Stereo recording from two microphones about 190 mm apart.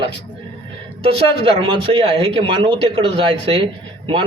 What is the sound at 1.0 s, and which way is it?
Speech, 30° right (ahead or behind).